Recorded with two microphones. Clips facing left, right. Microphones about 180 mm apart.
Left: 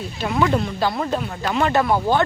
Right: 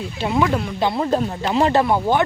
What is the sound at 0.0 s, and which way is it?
Speech, 25° right (ahead or behind).